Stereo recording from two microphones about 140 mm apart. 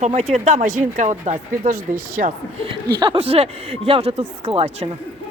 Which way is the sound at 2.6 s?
35° right (ahead or behind).